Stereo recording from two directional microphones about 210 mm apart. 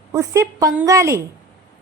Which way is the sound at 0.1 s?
15° right (ahead or behind).